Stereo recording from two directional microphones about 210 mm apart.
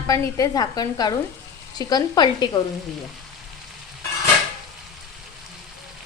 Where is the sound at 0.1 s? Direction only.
15° left (ahead or behind).